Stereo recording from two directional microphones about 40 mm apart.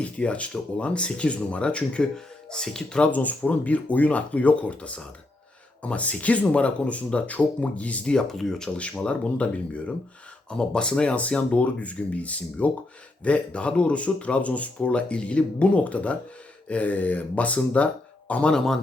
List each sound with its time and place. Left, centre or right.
0.0 s speech: left
2.1 s speech: centre
3.0 s speech: left
8.3 s speech: centre
8.7 s speech: left
10.5 s speech: centre
18.5 s speech: centre